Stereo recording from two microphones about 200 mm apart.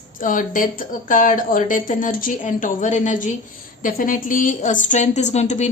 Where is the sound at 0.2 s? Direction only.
40° left (ahead or behind).